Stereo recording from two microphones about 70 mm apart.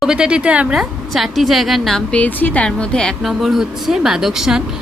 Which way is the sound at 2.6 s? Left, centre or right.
Centre.